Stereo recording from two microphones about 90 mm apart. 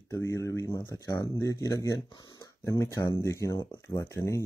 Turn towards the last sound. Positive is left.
turn(degrees=30)  # may be behind; listen again after turning